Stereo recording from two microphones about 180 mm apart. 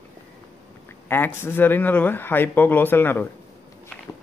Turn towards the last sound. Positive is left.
turn(degrees=10)  # may be behind; listen again after turning